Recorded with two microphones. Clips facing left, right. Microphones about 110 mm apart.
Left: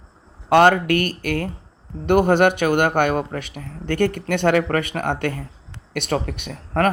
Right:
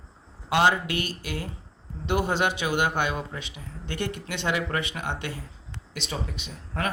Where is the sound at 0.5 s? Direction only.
60° left (ahead or behind).